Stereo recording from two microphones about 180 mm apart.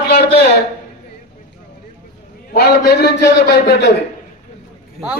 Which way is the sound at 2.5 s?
60° left (ahead or behind).